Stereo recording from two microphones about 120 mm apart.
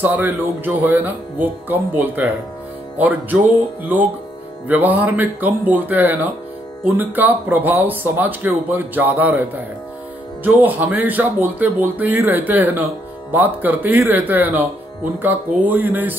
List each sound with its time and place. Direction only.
0.0 s speech: 15° right (ahead or behind)